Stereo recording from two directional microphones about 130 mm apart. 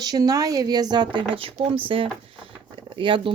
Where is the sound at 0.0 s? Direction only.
30° right (ahead or behind).